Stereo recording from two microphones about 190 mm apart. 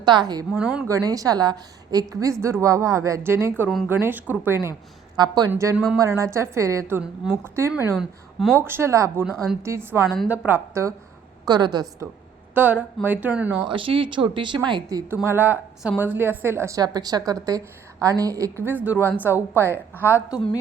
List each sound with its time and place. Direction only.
0.0 s speech: 20° right (ahead or behind)
0.6 s speech: 5° right (ahead or behind)
0.9 s a woman's voice: 15° right (ahead or behind)
12.5 s a woman's voice: 10° right (ahead or behind)
13.7 s a woman's voice: 25° right (ahead or behind); by 19.6 s 10° right (ahead or behind)
20.3 s a woman's voice: 20° left (ahead or behind)